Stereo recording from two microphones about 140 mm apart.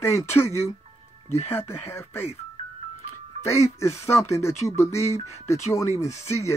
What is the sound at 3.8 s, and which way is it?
Speech, 20° left (ahead or behind).